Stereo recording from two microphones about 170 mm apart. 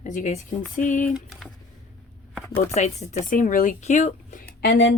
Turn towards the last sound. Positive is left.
turn(degrees=90)